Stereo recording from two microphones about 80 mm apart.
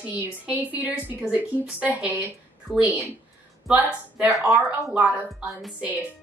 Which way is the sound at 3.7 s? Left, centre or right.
Right.